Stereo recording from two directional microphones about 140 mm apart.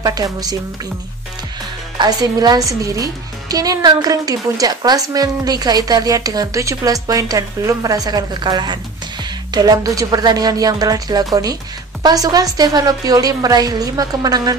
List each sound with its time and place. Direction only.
0.0 s a woman's voice: 25° right (ahead or behind)
2.0 s a woman's voice: 30° right (ahead or behind)